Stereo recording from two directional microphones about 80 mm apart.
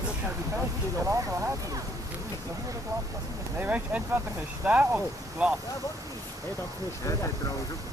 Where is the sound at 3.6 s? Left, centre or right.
Centre.